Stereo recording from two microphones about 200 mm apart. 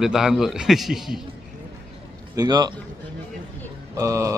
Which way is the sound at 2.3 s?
20° right (ahead or behind).